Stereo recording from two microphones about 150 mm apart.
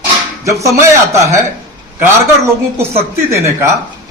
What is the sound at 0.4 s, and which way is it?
Speech, 20° right (ahead or behind).